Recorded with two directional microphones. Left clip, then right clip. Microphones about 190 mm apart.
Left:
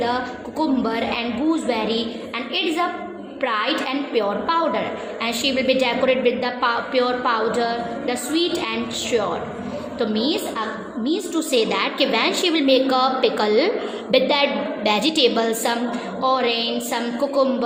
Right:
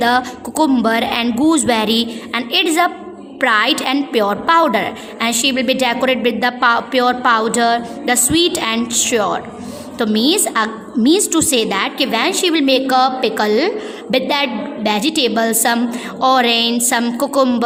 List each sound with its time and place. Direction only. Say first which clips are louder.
0.0 s a woman's voice: right 8 dB; 50° right (ahead or behind)
11.6 s a woman's voice: right 3 dB; 30° right (ahead or behind)
16.2 s a woman's voice: right 7 dB; 45° right (ahead or behind)